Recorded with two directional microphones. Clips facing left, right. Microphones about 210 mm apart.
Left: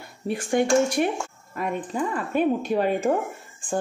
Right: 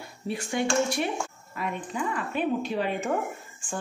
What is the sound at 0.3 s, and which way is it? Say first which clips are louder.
Speech: left 6 dB; 50° left (ahead or behind).